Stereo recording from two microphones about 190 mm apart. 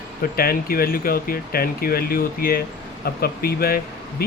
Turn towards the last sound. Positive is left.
turn(degrees=50)  # may be behind; listen again after turning